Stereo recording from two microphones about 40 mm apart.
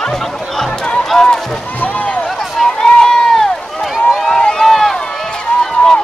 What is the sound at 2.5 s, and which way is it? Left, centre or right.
Run, centre.